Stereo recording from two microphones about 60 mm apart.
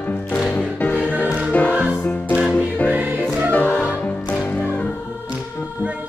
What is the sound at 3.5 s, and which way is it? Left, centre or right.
Music, left.